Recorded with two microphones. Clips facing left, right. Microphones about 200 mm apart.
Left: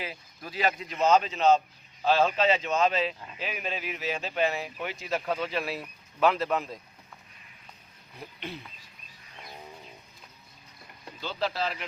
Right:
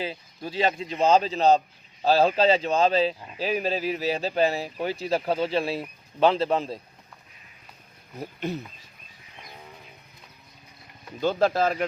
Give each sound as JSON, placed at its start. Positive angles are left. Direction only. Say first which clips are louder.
{"t": 0.0, "sound": "speech", "louder": "right 6 dB", "side_deg": -30}
{"t": 8.1, "sound": "speech", "louder": "right 9 dB", "side_deg": -45}
{"t": 11.2, "sound": "speech", "louder": "right 9 dB", "side_deg": -50}